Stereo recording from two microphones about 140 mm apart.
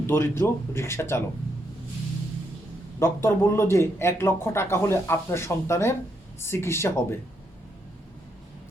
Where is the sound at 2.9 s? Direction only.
20° left (ahead or behind).